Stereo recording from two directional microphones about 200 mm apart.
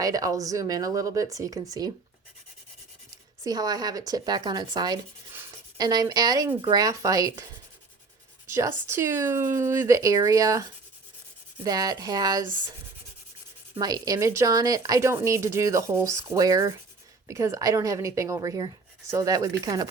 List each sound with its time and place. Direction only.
0.0 s speech: 15° right (ahead or behind)
3.4 s speech: 20° right (ahead or behind)
8.4 s speech: 15° right (ahead or behind)
13.7 s speech: 20° right (ahead or behind)